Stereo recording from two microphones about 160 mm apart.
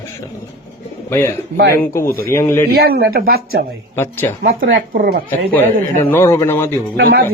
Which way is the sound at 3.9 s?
15° left (ahead or behind).